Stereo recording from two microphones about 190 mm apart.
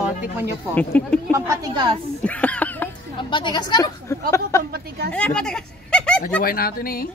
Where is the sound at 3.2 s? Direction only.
25° left (ahead or behind).